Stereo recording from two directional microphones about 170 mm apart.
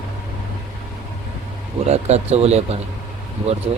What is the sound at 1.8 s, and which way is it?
Speech, 40° right (ahead or behind).